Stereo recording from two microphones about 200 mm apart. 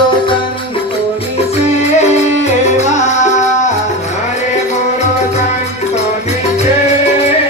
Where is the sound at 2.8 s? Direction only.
35° left (ahead or behind).